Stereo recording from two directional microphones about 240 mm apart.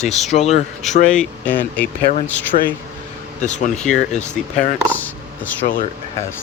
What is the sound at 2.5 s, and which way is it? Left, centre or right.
Speech, left.